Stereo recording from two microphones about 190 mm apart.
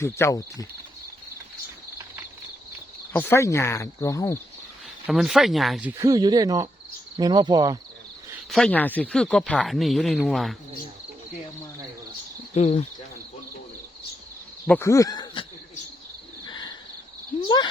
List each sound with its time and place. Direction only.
0.0 s speech: 15° left (ahead or behind)
3.1 s speech: 10° left (ahead or behind)
5.0 s speech: centre (ahead or behind); by 6.7 s 20° right (ahead or behind)
7.2 s cricket: 20° right (ahead or behind)
8.4 s speech: centre (ahead or behind)
12.5 s speech: 35° left (ahead or behind)
14.7 s speech: 15° left (ahead or behind)
16.5 s bird: 20° left (ahead or behind)
17.4 s speech: 25° left (ahead or behind)